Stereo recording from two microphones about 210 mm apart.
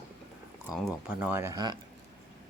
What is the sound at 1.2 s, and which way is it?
Speech, 10° right (ahead or behind).